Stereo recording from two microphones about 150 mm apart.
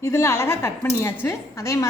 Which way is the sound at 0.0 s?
20° left (ahead or behind).